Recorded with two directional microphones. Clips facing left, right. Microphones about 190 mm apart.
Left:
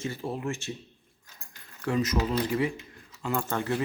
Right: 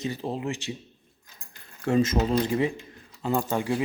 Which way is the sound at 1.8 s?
25° right (ahead or behind).